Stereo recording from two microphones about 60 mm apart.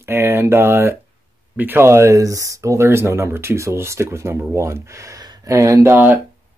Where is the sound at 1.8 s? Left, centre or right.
Right.